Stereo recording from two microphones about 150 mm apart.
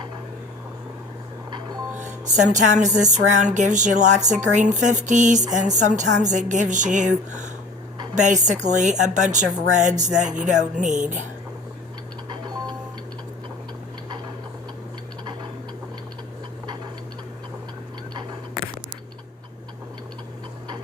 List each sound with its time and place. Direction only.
2.0 s a woman's voice: 55° right (ahead or behind)
8.1 s a woman's voice: 55° right (ahead or behind)